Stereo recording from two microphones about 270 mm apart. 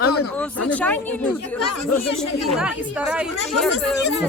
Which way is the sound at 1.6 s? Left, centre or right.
Left.